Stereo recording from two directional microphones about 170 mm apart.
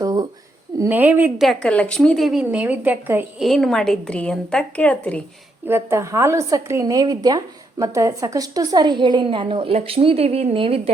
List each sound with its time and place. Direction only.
0.0 s a sound: 25° right (ahead or behind)
0.8 s a woman's voice: 10° right (ahead or behind)
1.5 s a woman's voice: 5° left (ahead or behind); by 3.4 s 10° right (ahead or behind)
3.4 s a woman's voice: centre (ahead or behind)
5.6 s a woman's voice: 15° right (ahead or behind); by 10.9 s 35° right (ahead or behind)